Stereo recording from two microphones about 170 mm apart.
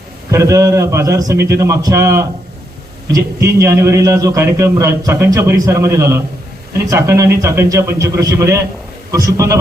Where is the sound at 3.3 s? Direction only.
20° right (ahead or behind).